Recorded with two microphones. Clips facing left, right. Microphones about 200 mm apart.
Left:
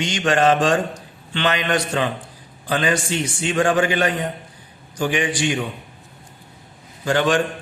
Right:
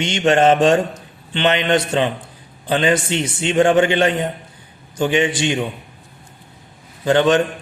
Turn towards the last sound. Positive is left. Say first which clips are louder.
# right 4 dB
turn(degrees=-20)  # may be behind; listen again after turning